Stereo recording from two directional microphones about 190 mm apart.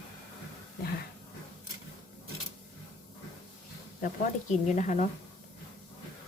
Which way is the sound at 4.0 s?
45° left (ahead or behind).